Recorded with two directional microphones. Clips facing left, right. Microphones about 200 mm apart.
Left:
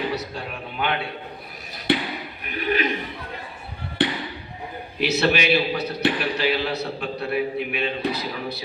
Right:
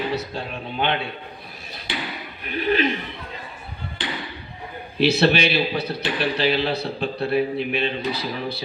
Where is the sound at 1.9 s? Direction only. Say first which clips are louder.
Left 9 dB; 60° left (ahead or behind).